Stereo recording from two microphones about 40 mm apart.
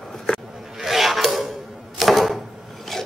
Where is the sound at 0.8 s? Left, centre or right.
Centre.